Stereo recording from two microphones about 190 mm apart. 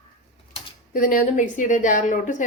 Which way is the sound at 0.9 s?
45° left (ahead or behind).